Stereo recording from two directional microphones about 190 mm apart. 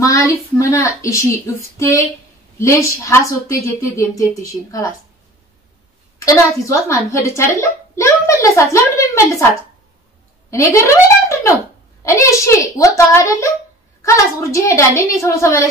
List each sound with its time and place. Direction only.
0.0 s a woman's voice: 15° left (ahead or behind)
6.2 s a woman's voice: 15° left (ahead or behind)
10.7 s a sound: 15° left (ahead or behind)
12.0 s a woman's voice: 15° left (ahead or behind)